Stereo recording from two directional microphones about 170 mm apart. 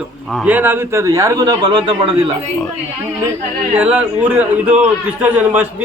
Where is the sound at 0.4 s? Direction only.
10° right (ahead or behind).